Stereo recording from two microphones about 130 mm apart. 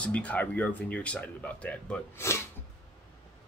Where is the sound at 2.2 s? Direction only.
20° left (ahead or behind).